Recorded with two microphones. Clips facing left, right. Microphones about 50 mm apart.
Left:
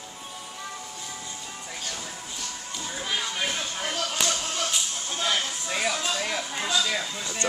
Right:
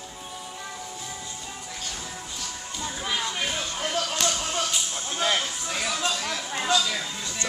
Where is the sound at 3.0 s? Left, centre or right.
Centre.